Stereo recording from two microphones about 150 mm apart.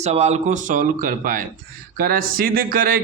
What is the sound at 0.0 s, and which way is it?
A man's voice, 45° right (ahead or behind).